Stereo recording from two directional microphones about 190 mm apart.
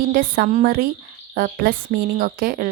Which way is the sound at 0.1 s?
50° right (ahead or behind).